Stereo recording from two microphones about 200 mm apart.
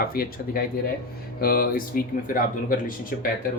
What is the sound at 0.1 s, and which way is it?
Speech, 50° left (ahead or behind).